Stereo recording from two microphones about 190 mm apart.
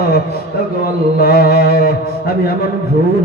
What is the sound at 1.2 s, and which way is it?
Music, 55° left (ahead or behind).